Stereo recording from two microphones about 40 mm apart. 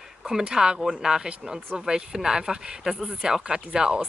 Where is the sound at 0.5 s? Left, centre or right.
Centre.